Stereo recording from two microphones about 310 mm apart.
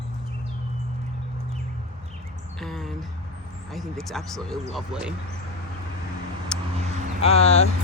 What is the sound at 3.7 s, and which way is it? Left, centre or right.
Speech, centre.